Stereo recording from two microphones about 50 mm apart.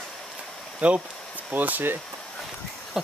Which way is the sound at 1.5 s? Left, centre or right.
Right.